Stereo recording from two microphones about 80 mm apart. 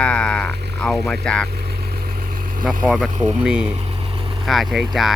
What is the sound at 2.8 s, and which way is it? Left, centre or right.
Speech, centre.